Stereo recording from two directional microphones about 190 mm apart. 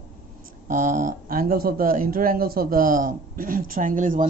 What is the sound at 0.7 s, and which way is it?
Speech, 45° right (ahead or behind).